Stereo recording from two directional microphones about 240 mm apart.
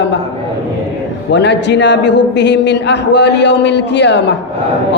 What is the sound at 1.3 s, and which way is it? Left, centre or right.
Mantra, left.